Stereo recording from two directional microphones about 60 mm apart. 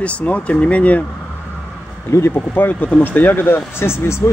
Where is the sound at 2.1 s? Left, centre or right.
Left.